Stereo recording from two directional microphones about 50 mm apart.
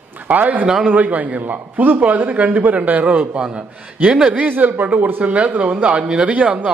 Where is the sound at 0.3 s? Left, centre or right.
Right.